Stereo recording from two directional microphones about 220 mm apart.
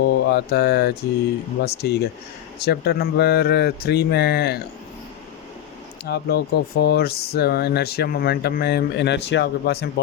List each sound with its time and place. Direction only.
0.0 s mantra: 45° left (ahead or behind)
1.6 s speech: 45° left (ahead or behind)
6.1 s speech: 45° left (ahead or behind)